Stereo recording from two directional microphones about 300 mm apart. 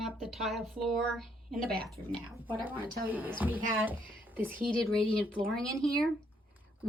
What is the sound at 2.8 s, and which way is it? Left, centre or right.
Speech, right.